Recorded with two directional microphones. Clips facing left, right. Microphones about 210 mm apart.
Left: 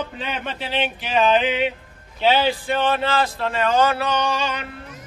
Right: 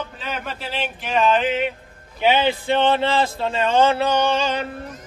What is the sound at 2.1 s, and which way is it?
A man's voice, 15° right (ahead or behind).